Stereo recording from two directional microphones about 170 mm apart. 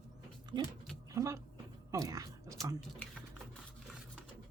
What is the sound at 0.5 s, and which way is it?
Dog, 25° right (ahead or behind).